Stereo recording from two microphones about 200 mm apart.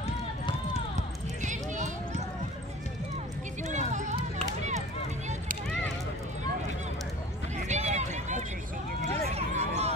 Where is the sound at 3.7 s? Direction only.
35° right (ahead or behind).